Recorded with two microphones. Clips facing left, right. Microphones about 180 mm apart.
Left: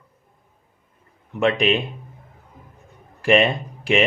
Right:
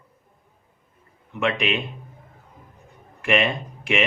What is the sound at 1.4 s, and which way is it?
Speech, 35° left (ahead or behind).